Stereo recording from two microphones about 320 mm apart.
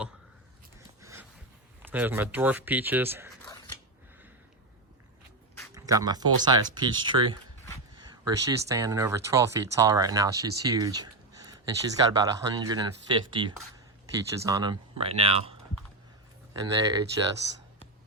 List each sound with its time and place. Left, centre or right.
1.0 s a sound: centre
1.8 s speech: centre
5.7 s speech: centre
16.6 s speech: centre